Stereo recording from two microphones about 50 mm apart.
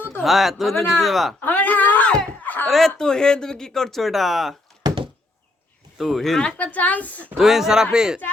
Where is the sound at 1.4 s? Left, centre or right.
Left.